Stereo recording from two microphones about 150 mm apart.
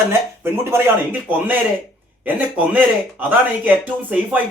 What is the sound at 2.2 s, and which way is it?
Speech, 10° right (ahead or behind).